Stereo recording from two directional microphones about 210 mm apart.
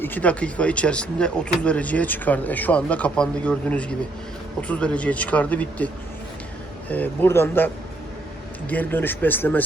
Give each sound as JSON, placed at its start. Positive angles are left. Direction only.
{"t": 0.0, "sound": "speech", "side_deg": 10}
{"t": 8.7, "sound": "speech", "side_deg": 10}